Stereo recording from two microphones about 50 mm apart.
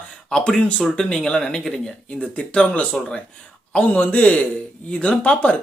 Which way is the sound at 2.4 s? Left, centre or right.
Left.